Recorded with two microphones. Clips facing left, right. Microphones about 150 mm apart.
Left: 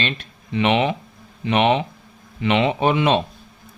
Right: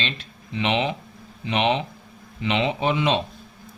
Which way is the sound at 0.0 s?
55° left (ahead or behind).